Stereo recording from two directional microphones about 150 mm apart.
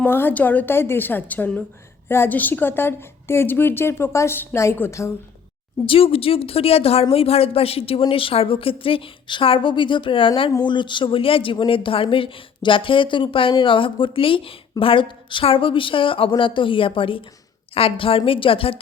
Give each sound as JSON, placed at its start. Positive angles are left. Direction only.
{"t": 0.0, "sound": "a woman's voice", "side_deg": 15}
{"t": 5.8, "sound": "speech", "side_deg": 40}